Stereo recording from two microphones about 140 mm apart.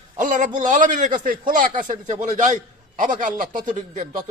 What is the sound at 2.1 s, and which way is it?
A man's voice, 60° right (ahead or behind).